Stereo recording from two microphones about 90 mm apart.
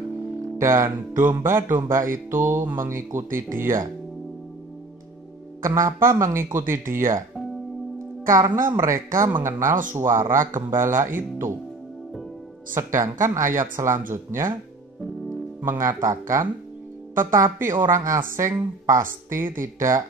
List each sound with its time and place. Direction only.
0.6 s speech: 35° right (ahead or behind)
5.6 s speech: 35° right (ahead or behind)
8.3 s speech: 40° right (ahead or behind)
12.7 s speech: 30° right (ahead or behind)
15.6 s speech: 25° right (ahead or behind)
16.0 s speech: 40° right (ahead or behind)